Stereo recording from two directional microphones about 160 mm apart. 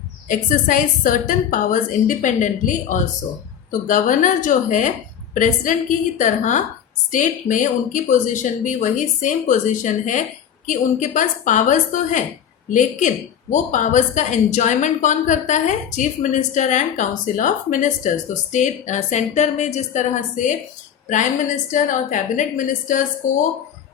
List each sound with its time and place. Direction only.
0.3 s a woman's voice: 55° left (ahead or behind)
13.5 s a woman's voice: 50° left (ahead or behind)